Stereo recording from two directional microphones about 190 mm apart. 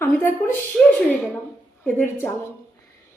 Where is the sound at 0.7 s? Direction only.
Centre (ahead or behind).